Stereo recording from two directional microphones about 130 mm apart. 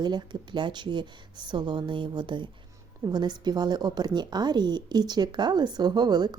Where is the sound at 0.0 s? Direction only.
35° right (ahead or behind).